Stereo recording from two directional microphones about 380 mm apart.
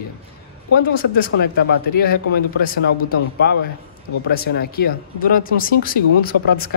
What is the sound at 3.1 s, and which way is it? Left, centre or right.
Speech, left.